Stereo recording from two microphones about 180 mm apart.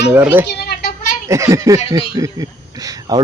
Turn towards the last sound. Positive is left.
turn(degrees=-20)  # may be behind; listen again after turning